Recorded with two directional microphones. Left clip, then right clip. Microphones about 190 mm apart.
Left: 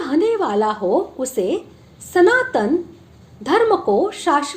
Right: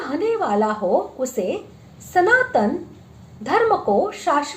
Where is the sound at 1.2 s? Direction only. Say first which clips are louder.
Left 3 dB; 30° left (ahead or behind).